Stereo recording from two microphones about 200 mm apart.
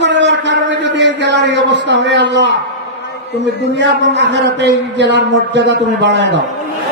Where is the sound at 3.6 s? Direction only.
60° right (ahead or behind).